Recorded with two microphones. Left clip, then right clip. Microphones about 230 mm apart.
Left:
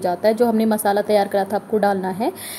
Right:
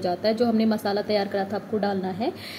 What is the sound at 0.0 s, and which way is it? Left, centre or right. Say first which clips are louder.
A woman's voice: left 6 dB; centre.